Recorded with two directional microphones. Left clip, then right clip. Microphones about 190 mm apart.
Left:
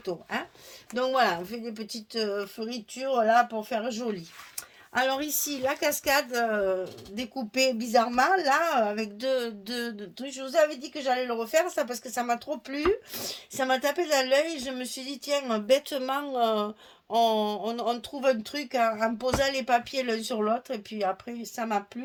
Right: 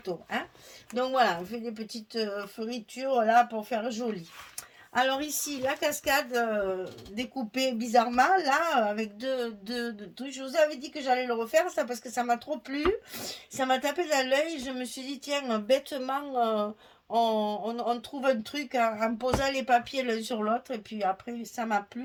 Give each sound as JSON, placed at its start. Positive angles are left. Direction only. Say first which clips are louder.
{"t": 0.0, "sound": "speech", "louder": "left 1 dB", "side_deg": 40}